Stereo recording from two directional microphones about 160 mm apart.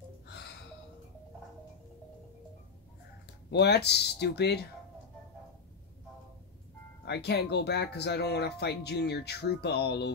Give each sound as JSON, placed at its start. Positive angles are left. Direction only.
{"t": 3.4, "sound": "speech", "side_deg": 90}
{"t": 7.1, "sound": "speech", "side_deg": 90}